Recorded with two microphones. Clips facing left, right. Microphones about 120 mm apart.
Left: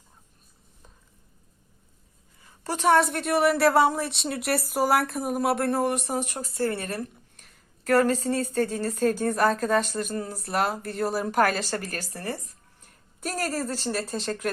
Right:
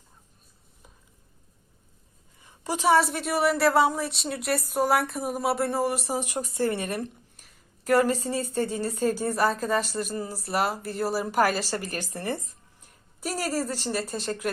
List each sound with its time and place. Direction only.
2.4 s a woman's voice: 10° right (ahead or behind)
6.2 s a woman's voice: 15° right (ahead or behind)
12.1 s speech: 25° right (ahead or behind)
12.8 s a woman's voice: 10° right (ahead or behind)